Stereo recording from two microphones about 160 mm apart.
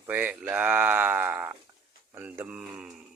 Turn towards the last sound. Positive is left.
turn(degrees=-5)  # may be behind; listen again after turning